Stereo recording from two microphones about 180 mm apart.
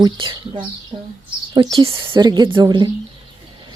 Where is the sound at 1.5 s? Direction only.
25° right (ahead or behind).